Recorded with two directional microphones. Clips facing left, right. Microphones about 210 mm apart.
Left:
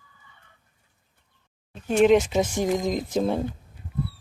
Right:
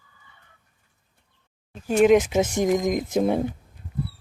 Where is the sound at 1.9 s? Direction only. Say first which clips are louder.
Right 1 dB; 5° right (ahead or behind).